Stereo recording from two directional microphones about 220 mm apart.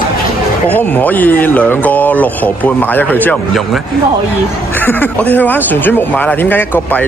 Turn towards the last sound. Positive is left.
turn(degrees=10)  # may be behind; listen again after turning